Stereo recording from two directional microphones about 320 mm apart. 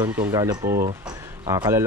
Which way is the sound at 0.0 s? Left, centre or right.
Centre.